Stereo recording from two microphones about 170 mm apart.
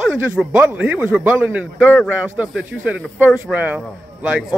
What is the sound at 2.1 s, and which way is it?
Speech, 10° right (ahead or behind).